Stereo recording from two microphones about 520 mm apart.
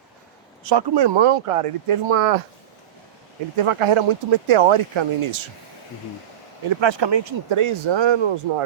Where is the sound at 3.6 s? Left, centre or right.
Right.